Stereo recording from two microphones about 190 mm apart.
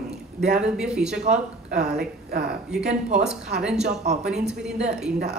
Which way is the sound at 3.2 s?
5° right (ahead or behind).